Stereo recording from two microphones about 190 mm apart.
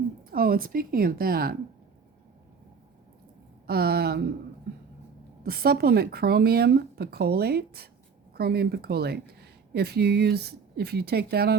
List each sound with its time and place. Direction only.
0.3 s speech: 50° right (ahead or behind)
3.7 s speech: 55° right (ahead or behind)
5.4 s speech: 55° right (ahead or behind)